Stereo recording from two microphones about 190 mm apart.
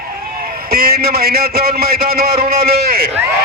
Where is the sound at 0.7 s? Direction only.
55° right (ahead or behind).